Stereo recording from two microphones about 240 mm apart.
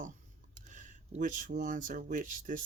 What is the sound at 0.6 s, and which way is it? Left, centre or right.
Speech, right.